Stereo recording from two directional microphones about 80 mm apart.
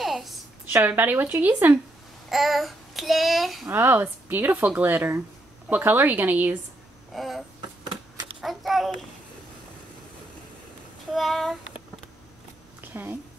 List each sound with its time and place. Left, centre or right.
0.0 s a sound: centre
0.8 s speech: right
2.2 s a child's voice: centre
3.7 s speech: right
7.2 s child singing: centre
8.4 s a child's voice: centre
11.1 s child singing: centre
12.9 s speech: right